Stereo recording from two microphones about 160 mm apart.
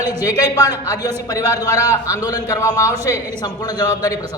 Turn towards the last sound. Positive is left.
turn(degrees=25)  # may be behind; listen again after turning